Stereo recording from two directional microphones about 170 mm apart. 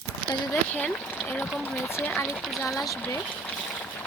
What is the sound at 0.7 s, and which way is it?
Speech, 10° left (ahead or behind).